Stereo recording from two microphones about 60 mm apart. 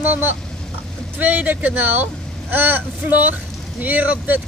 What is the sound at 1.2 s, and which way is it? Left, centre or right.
Speech, right.